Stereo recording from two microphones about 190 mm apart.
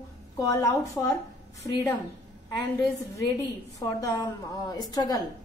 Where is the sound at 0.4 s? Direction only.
15° left (ahead or behind).